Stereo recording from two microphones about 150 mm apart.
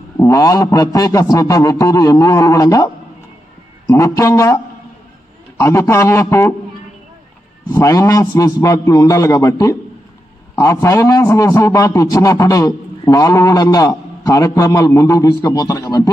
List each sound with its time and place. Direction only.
0.2 s a man's voice: 20° left (ahead or behind)
5.6 s a man's voice: 15° left (ahead or behind)
7.7 s a man's voice: 20° left (ahead or behind)